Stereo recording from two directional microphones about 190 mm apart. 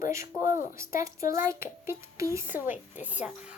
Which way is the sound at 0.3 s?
45° left (ahead or behind).